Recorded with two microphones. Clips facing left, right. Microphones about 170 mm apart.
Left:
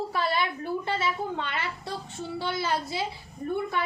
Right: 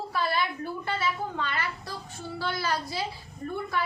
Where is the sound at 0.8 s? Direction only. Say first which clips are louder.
Right 1 dB; 20° left (ahead or behind).